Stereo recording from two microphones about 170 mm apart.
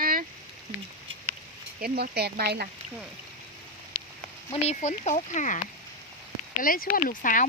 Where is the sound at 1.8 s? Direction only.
70° right (ahead or behind).